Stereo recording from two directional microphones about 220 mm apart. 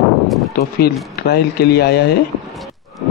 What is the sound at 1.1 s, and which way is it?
A man's voice, 45° left (ahead or behind).